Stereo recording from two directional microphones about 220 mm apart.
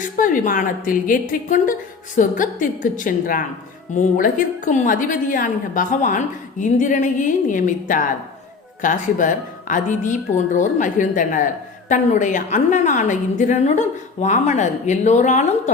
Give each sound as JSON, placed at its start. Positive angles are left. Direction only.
{"t": 0.0, "sound": "a woman's voice", "side_deg": 35}